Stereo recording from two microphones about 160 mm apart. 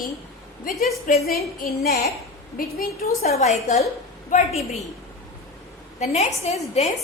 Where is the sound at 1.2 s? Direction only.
75° left (ahead or behind).